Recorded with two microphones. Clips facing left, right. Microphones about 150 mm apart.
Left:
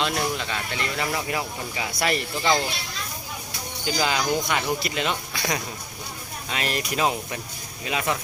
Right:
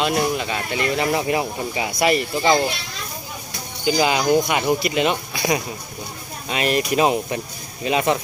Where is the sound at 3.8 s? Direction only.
15° right (ahead or behind).